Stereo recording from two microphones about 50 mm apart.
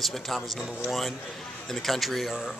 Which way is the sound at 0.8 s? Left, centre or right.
Centre.